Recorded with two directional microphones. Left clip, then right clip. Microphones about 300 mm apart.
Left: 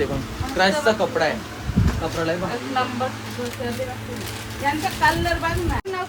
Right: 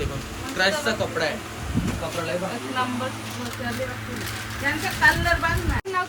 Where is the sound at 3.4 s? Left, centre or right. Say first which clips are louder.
Left 2 dB; centre.